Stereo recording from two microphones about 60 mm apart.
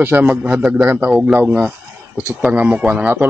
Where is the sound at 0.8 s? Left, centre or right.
Right.